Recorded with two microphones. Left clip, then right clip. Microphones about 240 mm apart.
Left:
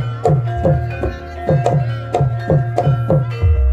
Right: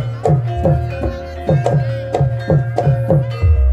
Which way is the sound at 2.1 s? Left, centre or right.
Left.